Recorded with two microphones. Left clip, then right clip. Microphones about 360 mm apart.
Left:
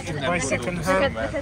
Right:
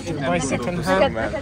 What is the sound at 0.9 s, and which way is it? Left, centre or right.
Speech, right.